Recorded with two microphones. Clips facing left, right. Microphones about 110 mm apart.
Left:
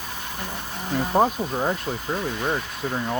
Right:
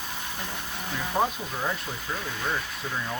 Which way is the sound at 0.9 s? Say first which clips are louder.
Left 7 dB; 45° left (ahead or behind).